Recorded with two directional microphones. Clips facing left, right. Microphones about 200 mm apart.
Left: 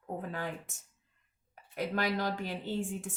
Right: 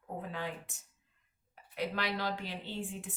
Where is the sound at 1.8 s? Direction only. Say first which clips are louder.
Left 3 dB; 45° left (ahead or behind).